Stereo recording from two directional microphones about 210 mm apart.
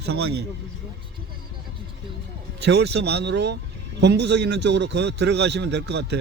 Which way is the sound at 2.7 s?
55° right (ahead or behind).